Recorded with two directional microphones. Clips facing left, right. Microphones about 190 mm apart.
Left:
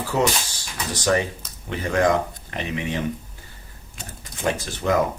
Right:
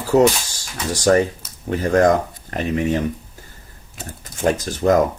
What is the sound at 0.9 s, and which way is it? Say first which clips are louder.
Speech: right 6 dB; 45° right (ahead or behind).